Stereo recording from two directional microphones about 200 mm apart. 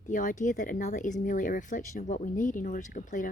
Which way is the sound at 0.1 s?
40° left (ahead or behind).